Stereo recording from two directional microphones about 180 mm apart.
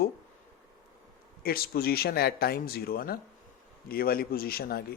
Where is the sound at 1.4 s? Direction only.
55° left (ahead or behind).